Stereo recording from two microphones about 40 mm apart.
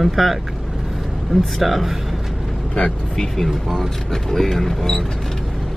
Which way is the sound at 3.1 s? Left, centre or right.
Centre.